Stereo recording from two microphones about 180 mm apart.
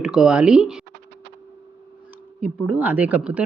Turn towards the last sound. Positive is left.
turn(degrees=-10)  # may be behind; listen again after turning